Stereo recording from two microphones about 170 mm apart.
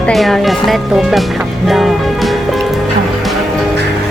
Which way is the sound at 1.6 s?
Centre (ahead or behind).